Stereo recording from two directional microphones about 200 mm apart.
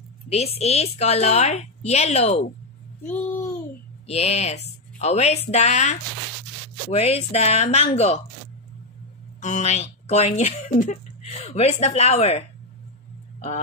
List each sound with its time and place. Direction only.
0.3 s speech: 30° left (ahead or behind)
3.1 s a child's voice: 10° left (ahead or behind)
4.1 s speech: 30° left (ahead or behind)
9.4 s speech: 35° left (ahead or behind)